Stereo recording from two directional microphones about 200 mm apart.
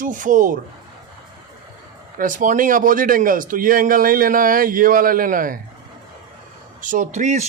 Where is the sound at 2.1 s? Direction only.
40° right (ahead or behind).